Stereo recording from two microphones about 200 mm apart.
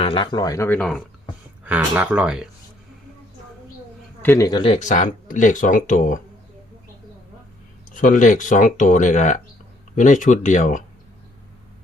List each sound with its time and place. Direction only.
0.0 s speech: 25° left (ahead or behind); by 1.0 s 5° left (ahead or behind)
1.6 s speech: 5° right (ahead or behind)
4.2 s speech: 15° left (ahead or behind); by 6.1 s 40° left (ahead or behind)
7.9 s speech: 40° left (ahead or behind)